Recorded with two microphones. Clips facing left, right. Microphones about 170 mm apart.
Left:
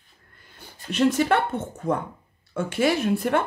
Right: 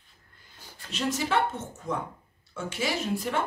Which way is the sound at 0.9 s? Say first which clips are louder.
Left 8 dB; 60° left (ahead or behind).